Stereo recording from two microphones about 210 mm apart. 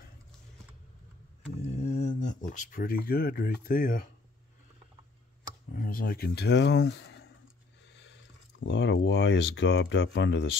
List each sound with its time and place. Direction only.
1.7 s speech: 30° left (ahead or behind)
5.8 s speech: 45° left (ahead or behind); by 10.6 s 60° left (ahead or behind)